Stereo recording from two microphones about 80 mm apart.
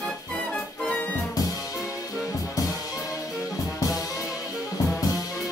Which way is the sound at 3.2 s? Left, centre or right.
Centre.